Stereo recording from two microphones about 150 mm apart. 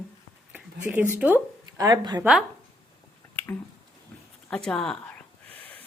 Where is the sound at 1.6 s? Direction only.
25° right (ahead or behind).